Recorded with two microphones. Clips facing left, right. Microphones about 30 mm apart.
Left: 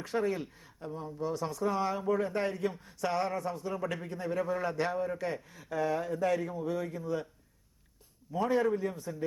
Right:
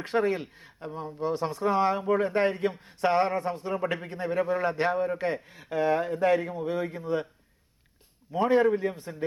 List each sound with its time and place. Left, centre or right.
0.0 s speech: right
8.3 s speech: right